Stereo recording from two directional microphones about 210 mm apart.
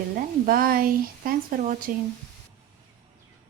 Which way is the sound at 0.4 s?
40° right (ahead or behind).